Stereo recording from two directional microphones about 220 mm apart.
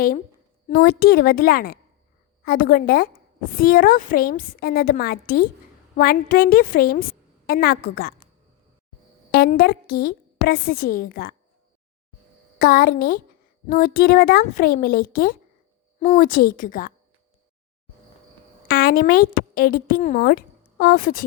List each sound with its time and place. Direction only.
0.7 s a woman's voice: 40° left (ahead or behind)
9.3 s a woman's voice: 45° left (ahead or behind)
12.5 s a woman's voice: 40° left (ahead or behind)
18.7 s speech: 45° left (ahead or behind)